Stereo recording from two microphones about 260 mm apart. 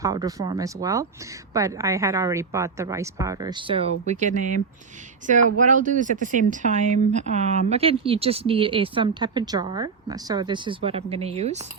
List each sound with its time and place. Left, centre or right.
0.0 s a woman's voice: centre